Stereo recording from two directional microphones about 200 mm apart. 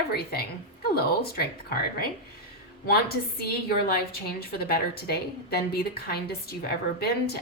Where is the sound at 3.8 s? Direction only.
50° left (ahead or behind).